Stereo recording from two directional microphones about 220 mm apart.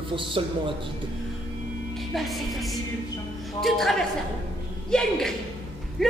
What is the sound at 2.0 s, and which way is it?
Speech, centre (ahead or behind).